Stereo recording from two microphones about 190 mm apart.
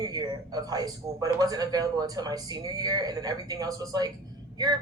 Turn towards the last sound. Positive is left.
turn(degrees=-20)  # may be behind; listen again after turning